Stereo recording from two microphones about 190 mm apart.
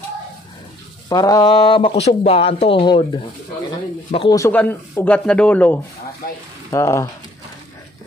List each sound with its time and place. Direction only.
1.0 s speech: 20° left (ahead or behind)
4.1 s speech: 30° left (ahead or behind)
4.4 s speech: 10° left (ahead or behind)